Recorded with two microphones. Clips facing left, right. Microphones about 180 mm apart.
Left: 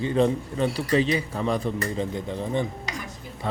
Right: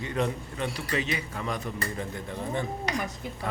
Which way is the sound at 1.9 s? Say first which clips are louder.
Left 6 dB; 20° left (ahead or behind).